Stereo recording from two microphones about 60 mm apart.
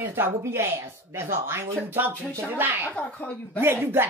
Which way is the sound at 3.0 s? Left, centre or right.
Left.